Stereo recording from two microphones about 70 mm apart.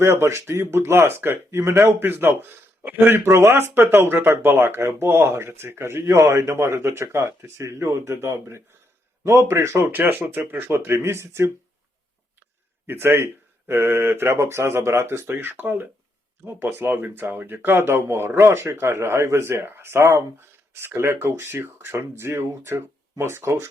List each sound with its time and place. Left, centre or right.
0.0 s speech: right
10.8 s speech: right
12.9 s speech: right